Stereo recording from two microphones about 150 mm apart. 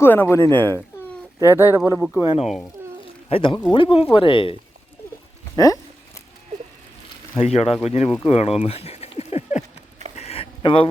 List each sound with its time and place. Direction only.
0.0 s speech: 15° left (ahead or behind)
1.4 s speech: 15° right (ahead or behind)
2.2 s speech: 40° left (ahead or behind)
5.5 s speech: 25° left (ahead or behind)
7.3 s speech: 45° left (ahead or behind)
8.3 s a sound: 45° left (ahead or behind)